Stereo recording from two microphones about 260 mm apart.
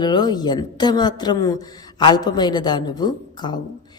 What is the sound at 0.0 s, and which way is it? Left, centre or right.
Speech, centre.